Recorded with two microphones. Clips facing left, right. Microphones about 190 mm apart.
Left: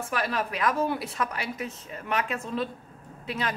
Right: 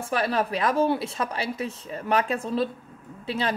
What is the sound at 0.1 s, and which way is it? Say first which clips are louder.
A woman's voice: right 6 dB; 30° right (ahead or behind).